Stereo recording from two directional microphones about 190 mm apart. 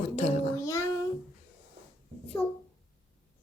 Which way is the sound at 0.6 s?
15° left (ahead or behind).